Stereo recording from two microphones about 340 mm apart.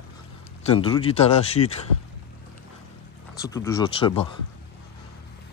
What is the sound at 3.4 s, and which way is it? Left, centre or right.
Speech, centre.